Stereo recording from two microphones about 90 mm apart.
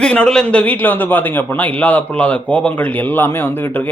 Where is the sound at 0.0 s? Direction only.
10° left (ahead or behind).